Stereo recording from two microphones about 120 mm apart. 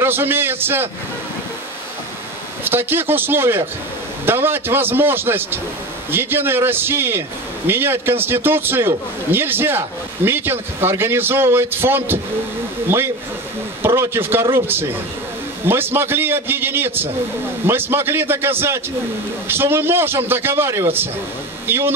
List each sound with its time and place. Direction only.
0.0 s a man's voice: 20° right (ahead or behind)
2.6 s a man's voice: 15° right (ahead or behind)